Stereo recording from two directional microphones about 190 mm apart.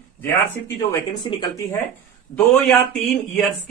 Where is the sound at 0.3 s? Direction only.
15° left (ahead or behind).